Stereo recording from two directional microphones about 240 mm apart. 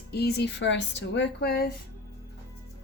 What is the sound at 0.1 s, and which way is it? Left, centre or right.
Speech, left.